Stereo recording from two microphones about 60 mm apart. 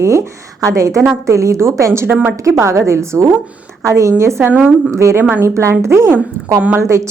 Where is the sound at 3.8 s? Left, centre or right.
Right.